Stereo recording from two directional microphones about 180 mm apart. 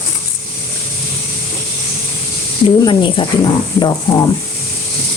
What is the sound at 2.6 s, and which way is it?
Speech, 25° left (ahead or behind).